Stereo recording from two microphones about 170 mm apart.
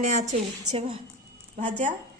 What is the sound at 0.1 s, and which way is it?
Speech, 45° right (ahead or behind).